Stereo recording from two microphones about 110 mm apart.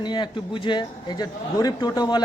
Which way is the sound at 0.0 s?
45° left (ahead or behind).